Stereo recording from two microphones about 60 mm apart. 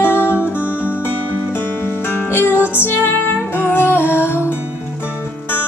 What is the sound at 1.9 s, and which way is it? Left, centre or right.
Music, left.